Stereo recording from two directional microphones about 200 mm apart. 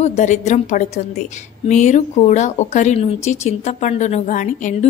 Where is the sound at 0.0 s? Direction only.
35° left (ahead or behind).